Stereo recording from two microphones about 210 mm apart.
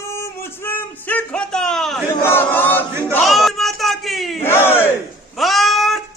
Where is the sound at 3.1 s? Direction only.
Centre (ahead or behind).